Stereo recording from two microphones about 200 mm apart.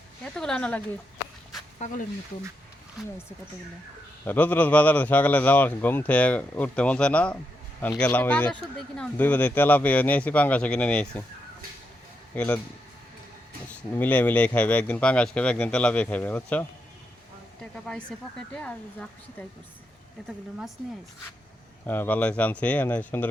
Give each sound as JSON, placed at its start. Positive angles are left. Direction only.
{"t": 0.3, "sound": "speech", "side_deg": 5}
{"t": 1.8, "sound": "speech", "side_deg": 35}
{"t": 4.3, "sound": "speech", "side_deg": 10}
{"t": 12.3, "sound": "speech", "side_deg": 5}
{"t": 13.9, "sound": "speech", "side_deg": 10}
{"t": 21.8, "sound": "speech", "side_deg": 10}